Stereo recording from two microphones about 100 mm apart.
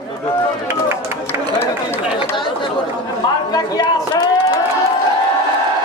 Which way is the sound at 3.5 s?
40° left (ahead or behind).